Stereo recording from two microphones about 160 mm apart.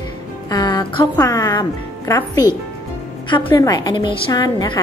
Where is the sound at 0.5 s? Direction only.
25° left (ahead or behind).